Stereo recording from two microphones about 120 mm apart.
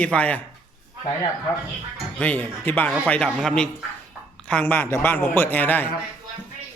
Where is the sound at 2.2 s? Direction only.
10° left (ahead or behind).